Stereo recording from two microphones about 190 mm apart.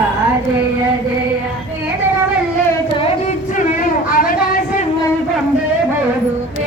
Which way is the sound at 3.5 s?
45° left (ahead or behind).